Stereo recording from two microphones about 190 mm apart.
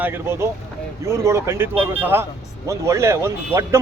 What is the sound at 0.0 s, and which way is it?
A man's voice, 10° right (ahead or behind).